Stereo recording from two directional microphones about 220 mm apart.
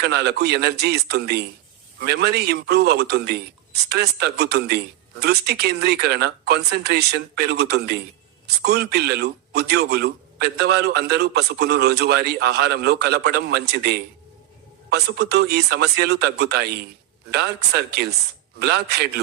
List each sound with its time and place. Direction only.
0.0 s a man's voice: 45° right (ahead or behind)